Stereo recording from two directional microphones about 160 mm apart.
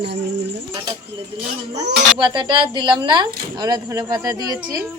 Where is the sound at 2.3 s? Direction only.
30° right (ahead or behind).